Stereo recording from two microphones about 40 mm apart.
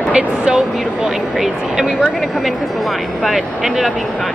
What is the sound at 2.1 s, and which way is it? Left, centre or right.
Speech, centre.